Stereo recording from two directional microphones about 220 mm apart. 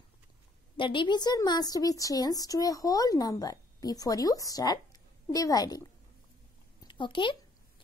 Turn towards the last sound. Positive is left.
turn(degrees=20)  # may be behind; listen again after turning